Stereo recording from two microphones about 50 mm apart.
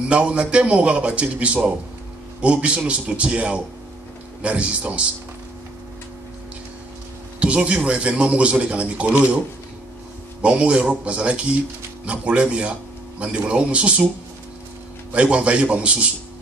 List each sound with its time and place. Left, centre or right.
0.1 s a man's voice: right
7.3 s a man's voice: right
10.4 s a man's voice: right
15.1 s a man's voice: right